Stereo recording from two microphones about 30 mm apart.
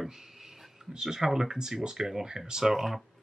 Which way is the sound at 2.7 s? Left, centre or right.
Centre.